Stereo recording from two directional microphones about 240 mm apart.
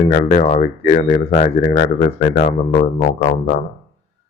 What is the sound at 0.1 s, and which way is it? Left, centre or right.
Speech, left.